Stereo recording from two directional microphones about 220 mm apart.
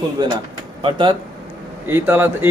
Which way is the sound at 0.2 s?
20° right (ahead or behind).